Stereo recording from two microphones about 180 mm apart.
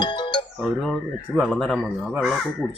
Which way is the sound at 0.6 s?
Centre (ahead or behind).